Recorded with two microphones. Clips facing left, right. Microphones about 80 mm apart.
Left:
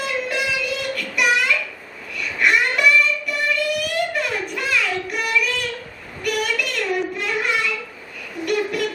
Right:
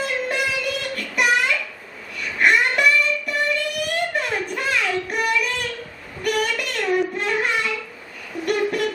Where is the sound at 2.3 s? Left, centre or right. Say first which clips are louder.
Right 1 dB; right.